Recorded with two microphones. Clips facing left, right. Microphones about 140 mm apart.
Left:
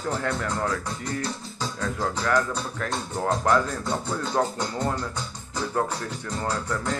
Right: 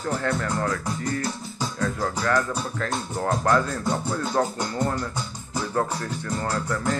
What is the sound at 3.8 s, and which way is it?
Music, 10° right (ahead or behind).